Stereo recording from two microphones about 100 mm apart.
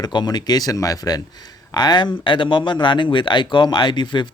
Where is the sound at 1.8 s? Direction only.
45° left (ahead or behind).